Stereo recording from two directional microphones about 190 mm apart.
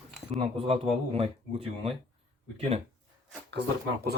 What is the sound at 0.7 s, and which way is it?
Speech, 30° right (ahead or behind).